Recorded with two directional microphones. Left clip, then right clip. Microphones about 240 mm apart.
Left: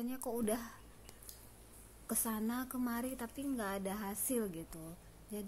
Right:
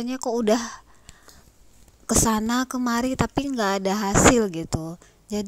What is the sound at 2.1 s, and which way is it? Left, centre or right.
A woman's voice, right.